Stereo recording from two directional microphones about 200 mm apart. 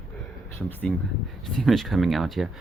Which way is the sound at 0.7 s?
10° left (ahead or behind).